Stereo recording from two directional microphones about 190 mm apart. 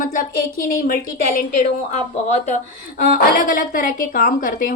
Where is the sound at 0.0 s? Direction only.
45° left (ahead or behind).